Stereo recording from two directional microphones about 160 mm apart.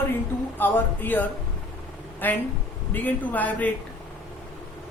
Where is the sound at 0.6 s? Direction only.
10° left (ahead or behind).